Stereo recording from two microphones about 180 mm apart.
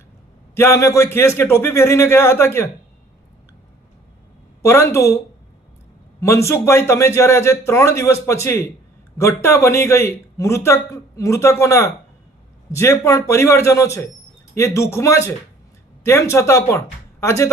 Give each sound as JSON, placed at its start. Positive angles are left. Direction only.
{"t": 0.5, "sound": "a man's voice", "side_deg": 15}
{"t": 4.6, "sound": "a man's voice", "side_deg": 15}
{"t": 6.1, "sound": "a man's voice", "side_deg": 15}